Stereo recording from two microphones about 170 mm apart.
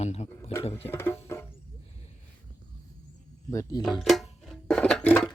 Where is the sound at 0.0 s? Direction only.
40° left (ahead or behind).